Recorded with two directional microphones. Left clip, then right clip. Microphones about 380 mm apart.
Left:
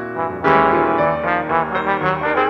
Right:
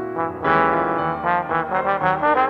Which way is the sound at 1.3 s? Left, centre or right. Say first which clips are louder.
Left 2 dB; right.